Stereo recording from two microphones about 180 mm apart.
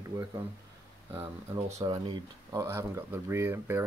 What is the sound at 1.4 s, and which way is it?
Speech, 20° right (ahead or behind).